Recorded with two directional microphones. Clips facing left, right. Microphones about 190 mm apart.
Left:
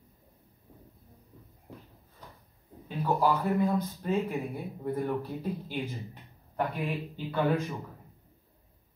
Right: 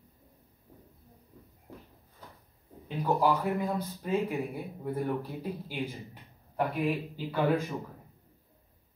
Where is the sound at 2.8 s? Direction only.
15° right (ahead or behind).